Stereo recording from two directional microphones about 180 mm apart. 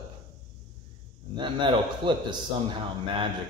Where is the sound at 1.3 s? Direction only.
25° right (ahead or behind).